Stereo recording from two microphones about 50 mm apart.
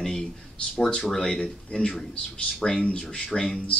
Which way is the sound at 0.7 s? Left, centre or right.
Centre.